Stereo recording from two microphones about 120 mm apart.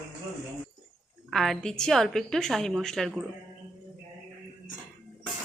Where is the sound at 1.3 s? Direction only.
Centre (ahead or behind).